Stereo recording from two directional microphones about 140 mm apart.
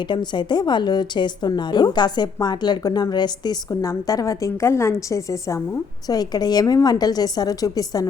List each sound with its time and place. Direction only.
0.0 s a woman's voice: 35° left (ahead or behind)